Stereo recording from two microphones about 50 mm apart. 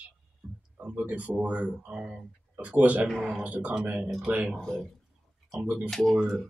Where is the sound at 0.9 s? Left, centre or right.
Right.